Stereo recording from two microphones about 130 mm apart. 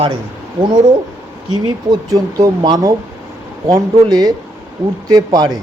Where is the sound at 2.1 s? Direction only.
30° right (ahead or behind).